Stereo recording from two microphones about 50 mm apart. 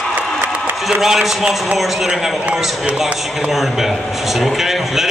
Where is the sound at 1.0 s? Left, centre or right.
Centre.